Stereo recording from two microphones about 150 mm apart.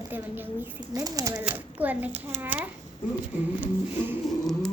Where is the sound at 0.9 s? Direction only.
25° right (ahead or behind).